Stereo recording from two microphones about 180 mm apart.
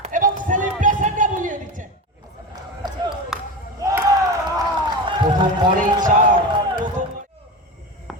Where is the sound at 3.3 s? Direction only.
Centre (ahead or behind).